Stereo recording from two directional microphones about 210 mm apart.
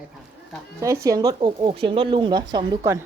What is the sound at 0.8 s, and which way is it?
Speech, 15° right (ahead or behind).